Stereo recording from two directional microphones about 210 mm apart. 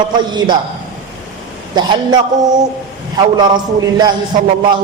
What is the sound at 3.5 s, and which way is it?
Speech, 20° right (ahead or behind).